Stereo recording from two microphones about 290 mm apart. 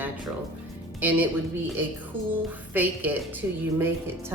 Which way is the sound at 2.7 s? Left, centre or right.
Centre.